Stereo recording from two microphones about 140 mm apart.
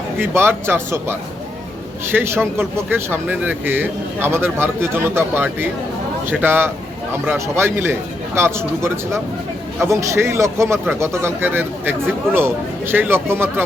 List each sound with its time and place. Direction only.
0.2 s speech: 15° right (ahead or behind)
2.1 s speech: 15° right (ahead or behind)